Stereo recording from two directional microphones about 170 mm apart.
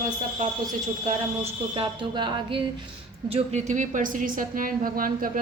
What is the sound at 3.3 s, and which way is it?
A woman's voice, 40° right (ahead or behind).